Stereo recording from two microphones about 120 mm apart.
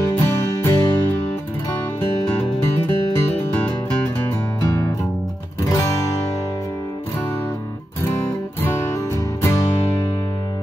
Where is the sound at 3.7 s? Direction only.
20° left (ahead or behind).